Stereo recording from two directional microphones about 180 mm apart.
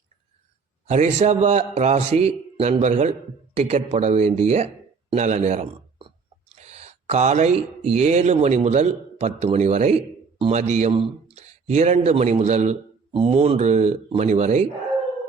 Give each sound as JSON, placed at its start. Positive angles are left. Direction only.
{"t": 0.9, "sound": "a man's voice", "side_deg": -40}